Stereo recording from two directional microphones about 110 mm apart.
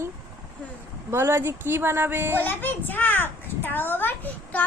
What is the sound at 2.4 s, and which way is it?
A child's voice, 15° left (ahead or behind).